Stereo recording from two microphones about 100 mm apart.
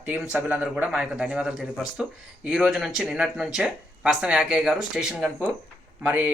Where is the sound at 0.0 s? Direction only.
15° right (ahead or behind).